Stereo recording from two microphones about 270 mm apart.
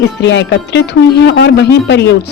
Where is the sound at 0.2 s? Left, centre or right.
Left.